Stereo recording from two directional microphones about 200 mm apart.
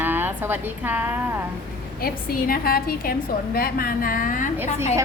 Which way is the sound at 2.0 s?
50° left (ahead or behind).